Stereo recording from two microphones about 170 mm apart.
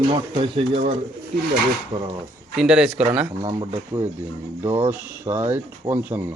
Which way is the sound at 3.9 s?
20° right (ahead or behind).